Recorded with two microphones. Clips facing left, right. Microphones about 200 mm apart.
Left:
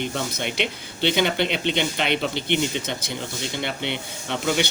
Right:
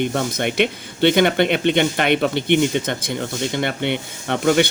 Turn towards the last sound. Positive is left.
turn(degrees=-55)  # may be behind; listen again after turning